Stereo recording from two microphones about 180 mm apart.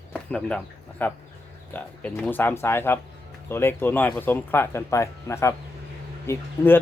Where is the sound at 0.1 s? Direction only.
5° left (ahead or behind).